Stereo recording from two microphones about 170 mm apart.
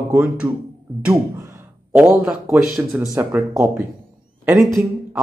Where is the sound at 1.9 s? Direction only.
10° right (ahead or behind).